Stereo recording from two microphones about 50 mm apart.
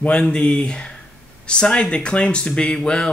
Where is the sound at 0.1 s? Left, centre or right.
Centre.